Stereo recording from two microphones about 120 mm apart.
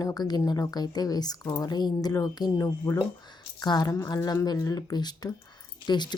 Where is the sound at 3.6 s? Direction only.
35° left (ahead or behind).